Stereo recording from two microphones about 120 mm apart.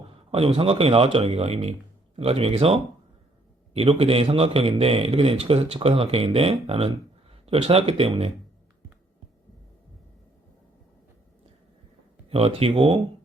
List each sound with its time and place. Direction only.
0.3 s a man's voice: 55° right (ahead or behind)
12.3 s a man's voice: 55° right (ahead or behind)